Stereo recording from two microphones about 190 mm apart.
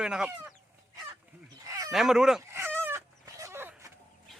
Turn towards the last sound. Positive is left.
turn(degrees=-15)  # may be behind; listen again after turning